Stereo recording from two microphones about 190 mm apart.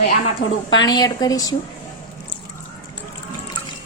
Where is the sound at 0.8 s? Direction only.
20° left (ahead or behind).